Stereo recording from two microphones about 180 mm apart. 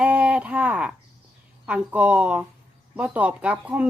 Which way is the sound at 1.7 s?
5° right (ahead or behind).